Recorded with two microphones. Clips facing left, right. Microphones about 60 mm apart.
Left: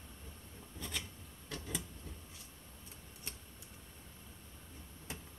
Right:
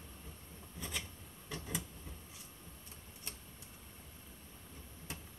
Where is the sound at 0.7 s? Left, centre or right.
Centre.